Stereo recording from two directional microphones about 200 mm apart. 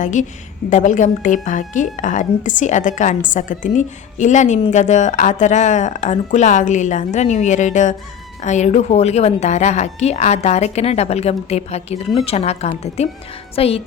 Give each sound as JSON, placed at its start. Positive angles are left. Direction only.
{"t": 0.0, "sound": "a woman's voice", "side_deg": 40}
{"t": 13.6, "sound": "music", "side_deg": 30}